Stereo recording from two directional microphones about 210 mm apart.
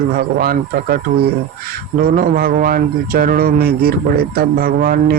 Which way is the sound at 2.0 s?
40° right (ahead or behind).